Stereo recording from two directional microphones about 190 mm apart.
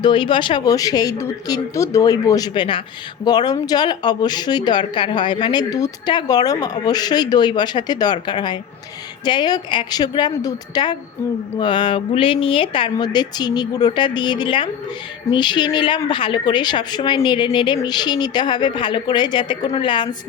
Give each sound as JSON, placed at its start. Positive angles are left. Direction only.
{"t": 0.0, "sound": "speech", "side_deg": 25}